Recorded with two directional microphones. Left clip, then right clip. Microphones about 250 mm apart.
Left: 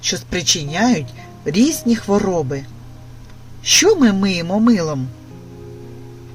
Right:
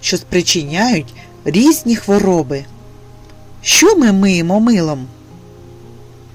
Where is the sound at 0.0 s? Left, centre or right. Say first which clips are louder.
Right 5 dB; right.